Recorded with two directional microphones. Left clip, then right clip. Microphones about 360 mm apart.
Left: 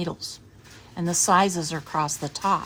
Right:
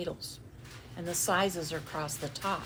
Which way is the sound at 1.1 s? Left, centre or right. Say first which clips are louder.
Left 9 dB; left.